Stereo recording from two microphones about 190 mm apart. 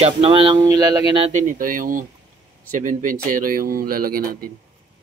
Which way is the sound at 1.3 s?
45° right (ahead or behind).